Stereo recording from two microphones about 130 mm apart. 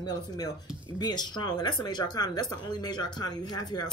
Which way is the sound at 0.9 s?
35° left (ahead or behind).